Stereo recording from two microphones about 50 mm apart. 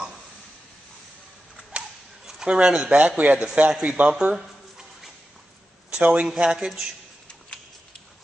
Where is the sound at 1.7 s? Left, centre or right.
Right.